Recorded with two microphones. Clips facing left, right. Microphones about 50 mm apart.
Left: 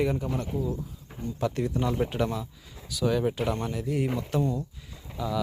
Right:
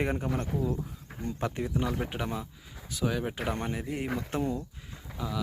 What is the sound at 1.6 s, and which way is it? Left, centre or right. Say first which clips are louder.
Speech: left 4 dB; centre.